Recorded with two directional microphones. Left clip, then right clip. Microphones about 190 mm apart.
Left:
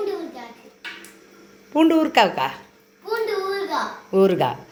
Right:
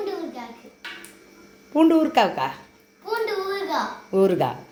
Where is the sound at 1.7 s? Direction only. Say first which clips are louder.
Even; 5° left (ahead or behind).